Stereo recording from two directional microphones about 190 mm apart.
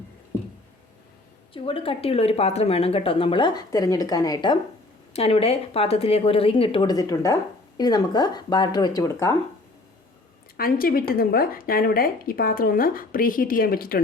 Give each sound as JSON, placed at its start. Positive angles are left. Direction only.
{"t": 1.5, "sound": "speech", "side_deg": 30}
{"t": 5.1, "sound": "speech", "side_deg": 30}
{"t": 10.6, "sound": "a woman's voice", "side_deg": 50}